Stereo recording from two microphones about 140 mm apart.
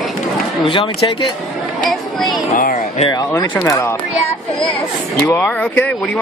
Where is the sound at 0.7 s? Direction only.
35° left (ahead or behind).